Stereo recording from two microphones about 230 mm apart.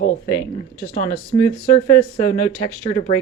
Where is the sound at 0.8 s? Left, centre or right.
Left.